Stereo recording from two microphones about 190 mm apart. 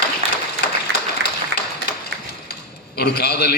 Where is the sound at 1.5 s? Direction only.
65° right (ahead or behind).